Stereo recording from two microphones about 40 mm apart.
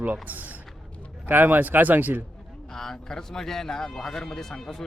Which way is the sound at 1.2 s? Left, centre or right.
Right.